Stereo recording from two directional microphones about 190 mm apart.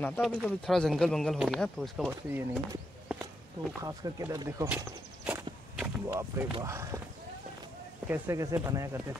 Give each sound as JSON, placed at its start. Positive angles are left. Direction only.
{"t": 0.2, "sound": "speech", "side_deg": 0}
{"t": 3.8, "sound": "speech", "side_deg": -20}
{"t": 5.2, "sound": "a sound", "side_deg": -10}
{"t": 6.5, "sound": "speech", "side_deg": -15}
{"t": 8.1, "sound": "speech", "side_deg": -15}